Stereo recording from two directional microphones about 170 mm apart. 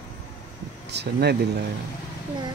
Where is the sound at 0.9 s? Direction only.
80° right.